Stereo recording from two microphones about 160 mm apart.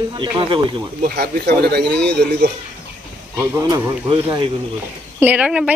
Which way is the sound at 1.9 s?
5° left (ahead or behind).